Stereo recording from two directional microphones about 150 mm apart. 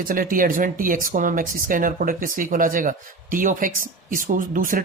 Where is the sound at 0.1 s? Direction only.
65° right (ahead or behind).